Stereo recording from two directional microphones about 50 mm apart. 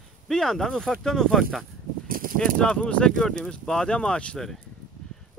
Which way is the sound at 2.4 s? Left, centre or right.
Centre.